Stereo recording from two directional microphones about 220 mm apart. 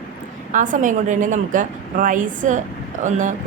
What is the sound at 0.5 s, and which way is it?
Speech, 35° right (ahead or behind).